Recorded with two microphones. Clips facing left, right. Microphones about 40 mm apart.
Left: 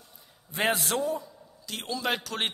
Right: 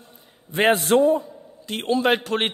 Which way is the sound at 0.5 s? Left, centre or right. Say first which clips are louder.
Right 9 dB; right.